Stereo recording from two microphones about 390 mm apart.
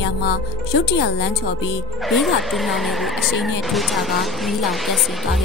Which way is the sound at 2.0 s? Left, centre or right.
Centre.